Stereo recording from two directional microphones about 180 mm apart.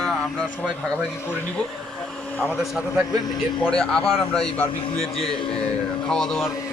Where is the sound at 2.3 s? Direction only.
5° left (ahead or behind).